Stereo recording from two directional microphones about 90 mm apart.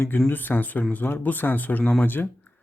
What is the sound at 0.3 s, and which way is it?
Speech, 20° left (ahead or behind).